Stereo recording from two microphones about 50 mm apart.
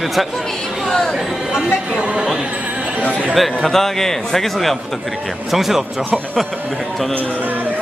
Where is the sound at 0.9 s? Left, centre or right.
Centre.